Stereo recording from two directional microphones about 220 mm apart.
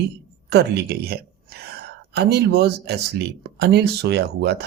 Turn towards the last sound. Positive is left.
turn(degrees=-50)  # may be behind; listen again after turning